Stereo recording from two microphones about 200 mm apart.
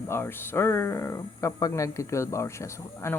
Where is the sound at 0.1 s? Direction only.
10° left (ahead or behind).